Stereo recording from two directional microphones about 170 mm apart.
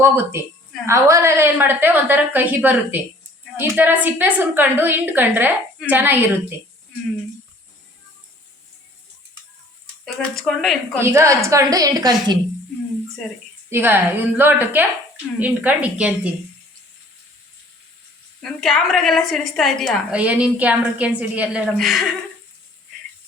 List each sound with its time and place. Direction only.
0.0 s a woman's voice: 15° right (ahead or behind)
10.2 s a woman's voice: centre (ahead or behind)
11.0 s a woman's voice: 15° right (ahead or behind)
13.2 s a woman's voice: centre (ahead or behind)
13.7 s a woman's voice: 15° right (ahead or behind)
18.4 s a woman's voice: centre (ahead or behind)